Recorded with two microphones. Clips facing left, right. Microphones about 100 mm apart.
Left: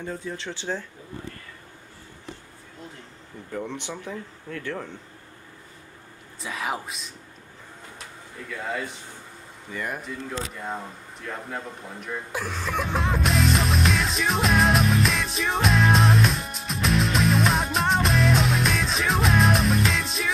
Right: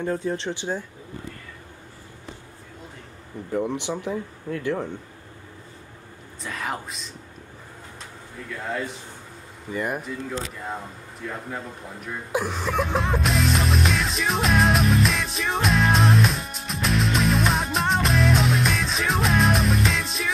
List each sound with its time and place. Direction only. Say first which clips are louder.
0.0 s speech: right 7 dB; 60° right (ahead or behind)
0.4 s speech: right 3 dB; 15° right (ahead or behind)
3.5 s speech: right 6 dB; 15° right (ahead or behind)
6.4 s speech: left 1 dB; 5° left (ahead or behind)
8.5 s speech: right 1 dB; centre (ahead or behind)
12.4 s music: right 5 dB; 5° right (ahead or behind)